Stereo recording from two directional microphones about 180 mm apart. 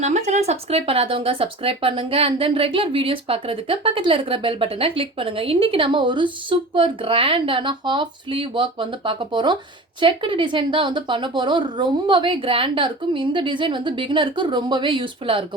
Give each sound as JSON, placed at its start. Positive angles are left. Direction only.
{"t": 0.0, "sound": "speech", "side_deg": -40}